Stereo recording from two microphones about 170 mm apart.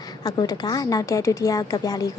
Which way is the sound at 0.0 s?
25° left (ahead or behind).